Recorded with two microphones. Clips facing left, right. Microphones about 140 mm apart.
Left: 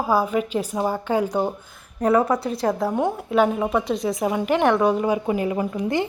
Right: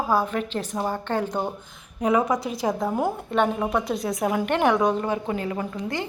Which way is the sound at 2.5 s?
Centre (ahead or behind).